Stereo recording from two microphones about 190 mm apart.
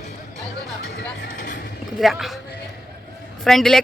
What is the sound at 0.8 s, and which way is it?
Music, 60° left (ahead or behind).